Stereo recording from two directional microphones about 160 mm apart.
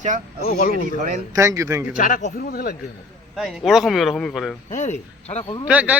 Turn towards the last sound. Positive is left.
turn(degrees=-10)  # may be behind; listen again after turning